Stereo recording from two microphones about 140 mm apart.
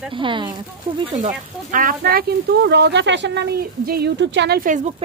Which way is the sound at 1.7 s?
85° right.